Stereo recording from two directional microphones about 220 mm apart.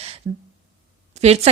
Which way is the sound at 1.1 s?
30° right (ahead or behind).